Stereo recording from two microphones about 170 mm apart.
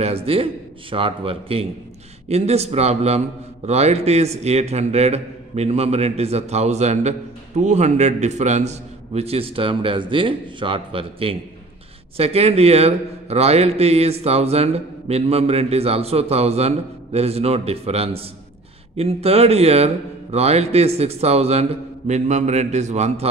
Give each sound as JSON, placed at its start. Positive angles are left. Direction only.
{"t": 0.0, "sound": "a man's voice", "side_deg": -35}